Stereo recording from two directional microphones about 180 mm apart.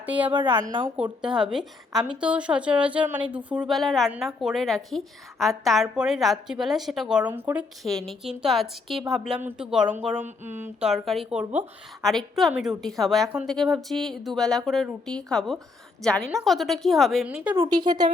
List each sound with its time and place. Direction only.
0.0 s a woman's voice: 10° right (ahead or behind)
7.9 s a woman's voice: centre (ahead or behind)
17.6 s speech: 25° right (ahead or behind)